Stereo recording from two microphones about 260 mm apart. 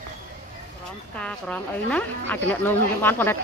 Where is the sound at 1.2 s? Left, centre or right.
Centre.